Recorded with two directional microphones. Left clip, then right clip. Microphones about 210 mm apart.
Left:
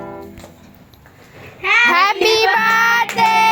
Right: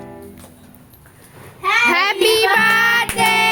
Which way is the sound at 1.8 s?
10° right (ahead or behind).